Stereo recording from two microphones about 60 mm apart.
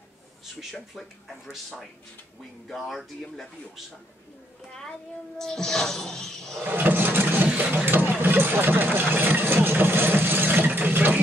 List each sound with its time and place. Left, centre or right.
2.9 s speech: centre
5.4 s speech: centre
6.6 s vehicle: right